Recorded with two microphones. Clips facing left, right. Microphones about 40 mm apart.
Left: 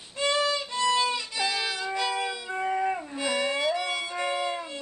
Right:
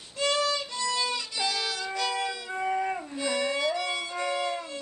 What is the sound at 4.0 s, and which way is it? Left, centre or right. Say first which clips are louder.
Violin: left 1 dB; left.